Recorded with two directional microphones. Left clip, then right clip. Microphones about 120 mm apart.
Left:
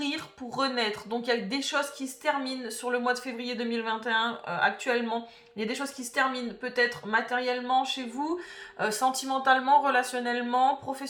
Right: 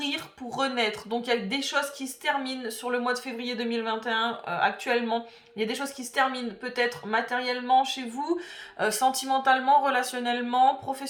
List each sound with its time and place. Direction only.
0.0 s speech: 25° right (ahead or behind)
8.8 s speech: 30° right (ahead or behind)
9.2 s speech: 20° right (ahead or behind)